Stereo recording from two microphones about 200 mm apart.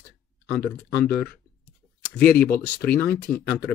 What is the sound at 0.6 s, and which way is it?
Speech, 5° left (ahead or behind).